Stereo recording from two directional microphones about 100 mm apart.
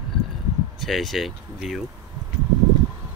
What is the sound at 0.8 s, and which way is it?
Speech, centre (ahead or behind).